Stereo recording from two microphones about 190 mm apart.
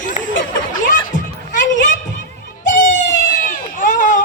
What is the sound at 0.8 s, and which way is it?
Music, 45° left (ahead or behind).